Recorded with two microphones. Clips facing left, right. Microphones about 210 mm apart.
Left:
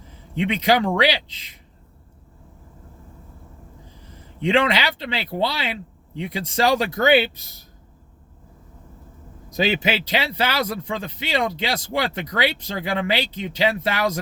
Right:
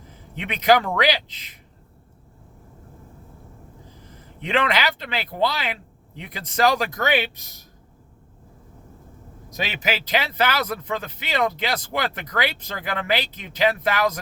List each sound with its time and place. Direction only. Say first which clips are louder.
0.3 s speech: even; 25° left (ahead or behind)
4.4 s speech: left 3 dB; 25° left (ahead or behind)
9.8 s speech: left 1 dB; 25° left (ahead or behind)